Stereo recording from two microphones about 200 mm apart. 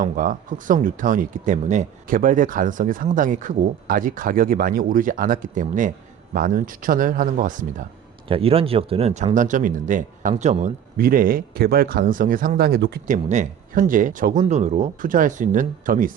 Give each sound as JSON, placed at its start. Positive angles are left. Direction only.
{"t": 0.0, "sound": "speech", "side_deg": -40}
{"t": 8.3, "sound": "speech", "side_deg": -30}
{"t": 13.2, "sound": "speech", "side_deg": -40}